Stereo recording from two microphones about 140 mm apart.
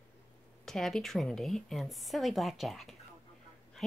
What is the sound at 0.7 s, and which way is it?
A woman's voice, 5° left (ahead or behind).